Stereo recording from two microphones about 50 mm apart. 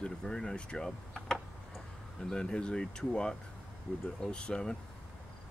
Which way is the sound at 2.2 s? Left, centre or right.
Centre.